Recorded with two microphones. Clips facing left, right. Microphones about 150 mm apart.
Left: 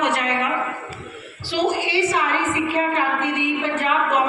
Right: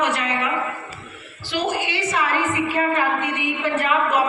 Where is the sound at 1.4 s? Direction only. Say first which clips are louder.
Left 2 dB; 35° left (ahead or behind).